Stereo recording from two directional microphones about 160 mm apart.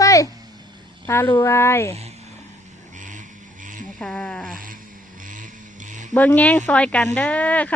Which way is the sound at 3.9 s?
5° left (ahead or behind).